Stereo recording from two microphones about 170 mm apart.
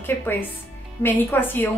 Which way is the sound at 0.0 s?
10° left (ahead or behind).